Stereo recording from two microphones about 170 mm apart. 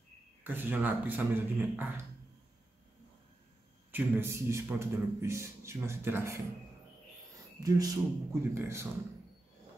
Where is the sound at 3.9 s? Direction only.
15° right (ahead or behind).